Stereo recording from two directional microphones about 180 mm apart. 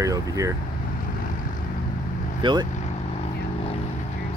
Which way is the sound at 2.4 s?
25° right (ahead or behind).